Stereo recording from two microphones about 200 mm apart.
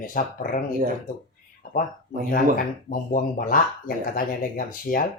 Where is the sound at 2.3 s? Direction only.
45° left (ahead or behind).